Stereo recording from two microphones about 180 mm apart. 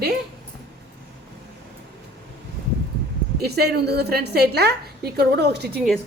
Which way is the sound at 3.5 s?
60° right (ahead or behind).